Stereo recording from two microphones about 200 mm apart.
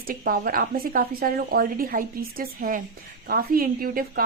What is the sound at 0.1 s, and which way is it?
A woman's voice, 45° right (ahead or behind).